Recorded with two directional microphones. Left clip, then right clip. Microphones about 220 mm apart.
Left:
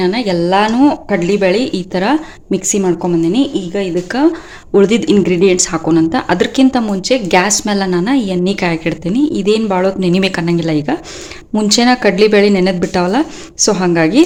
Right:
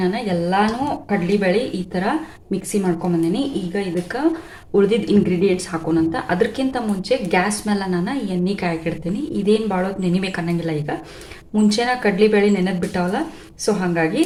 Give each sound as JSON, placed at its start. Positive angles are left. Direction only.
{"t": 0.0, "sound": "a woman's voice", "side_deg": 45}